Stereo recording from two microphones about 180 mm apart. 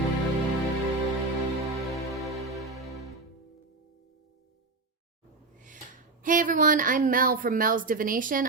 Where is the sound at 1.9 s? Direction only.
Centre (ahead or behind).